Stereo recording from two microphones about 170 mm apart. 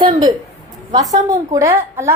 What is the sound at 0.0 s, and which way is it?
A woman's voice, 25° right (ahead or behind).